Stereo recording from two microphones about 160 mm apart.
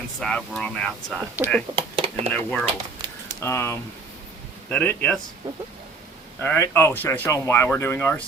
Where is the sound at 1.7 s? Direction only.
35° right (ahead or behind).